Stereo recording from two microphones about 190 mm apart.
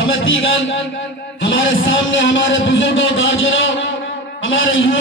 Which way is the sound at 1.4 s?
80° left.